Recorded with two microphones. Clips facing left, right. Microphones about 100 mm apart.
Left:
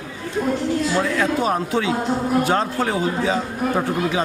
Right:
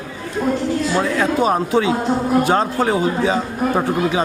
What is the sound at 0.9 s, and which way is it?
A man's voice, 30° right (ahead or behind).